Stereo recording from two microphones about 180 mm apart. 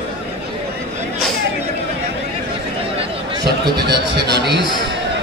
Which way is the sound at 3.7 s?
65° right (ahead or behind).